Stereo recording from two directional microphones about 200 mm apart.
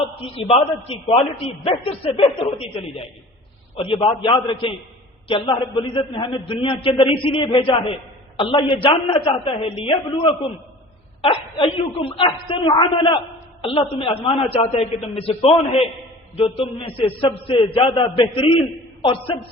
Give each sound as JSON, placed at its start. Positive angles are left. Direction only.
{"t": 0.3, "sound": "a man's voice", "side_deg": 30}